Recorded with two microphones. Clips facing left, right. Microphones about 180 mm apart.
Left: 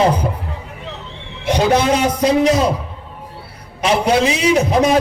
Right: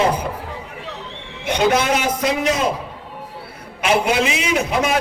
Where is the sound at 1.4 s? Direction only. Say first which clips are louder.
Left 3 dB; 35° left (ahead or behind).